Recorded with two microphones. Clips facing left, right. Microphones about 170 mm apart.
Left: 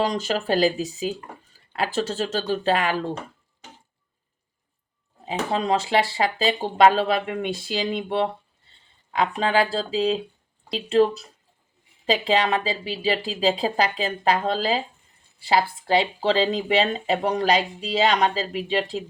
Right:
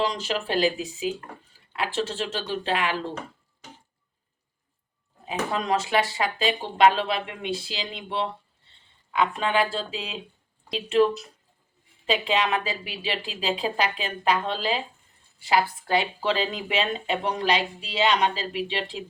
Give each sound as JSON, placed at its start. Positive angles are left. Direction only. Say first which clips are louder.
{"t": 0.0, "sound": "speech", "louder": "left 3 dB", "side_deg": 45}
{"t": 5.2, "sound": "speech", "louder": "left 3 dB", "side_deg": 25}
{"t": 6.6, "sound": "speech", "louder": "left 3 dB", "side_deg": 40}
{"t": 9.1, "sound": "speech", "louder": "left 2 dB", "side_deg": 35}